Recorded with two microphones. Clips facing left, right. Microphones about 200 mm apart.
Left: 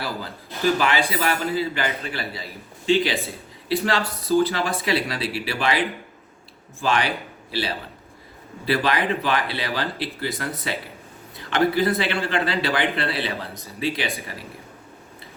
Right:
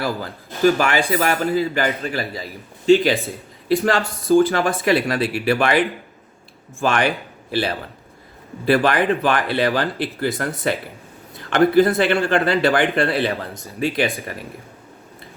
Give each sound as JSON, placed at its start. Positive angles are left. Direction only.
{"t": 0.0, "sound": "speech", "side_deg": -50}